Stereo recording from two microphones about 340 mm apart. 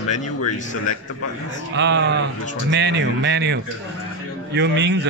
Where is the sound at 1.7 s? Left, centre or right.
Right.